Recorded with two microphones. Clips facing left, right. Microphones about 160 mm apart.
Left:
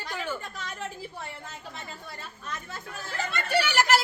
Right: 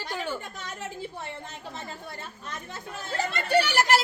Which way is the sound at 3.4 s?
35° right (ahead or behind).